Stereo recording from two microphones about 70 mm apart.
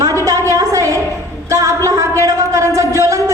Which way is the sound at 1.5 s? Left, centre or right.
Right.